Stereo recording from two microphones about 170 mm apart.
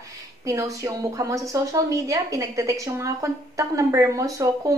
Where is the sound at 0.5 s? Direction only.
20° right (ahead or behind).